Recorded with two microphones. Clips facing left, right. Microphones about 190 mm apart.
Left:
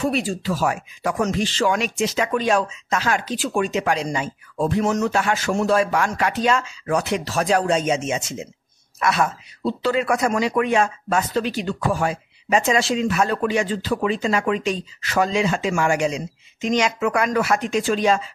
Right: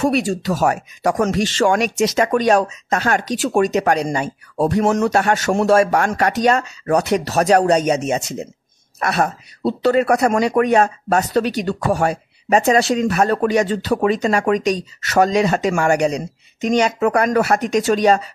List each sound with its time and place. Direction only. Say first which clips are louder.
0.0 s speech: right 5 dB; 70° right (ahead or behind)
0.6 s speech: right 5 dB; 40° right (ahead or behind)
5.3 s speech: right 5 dB; 65° right (ahead or behind); by 17.8 s 40° right (ahead or behind)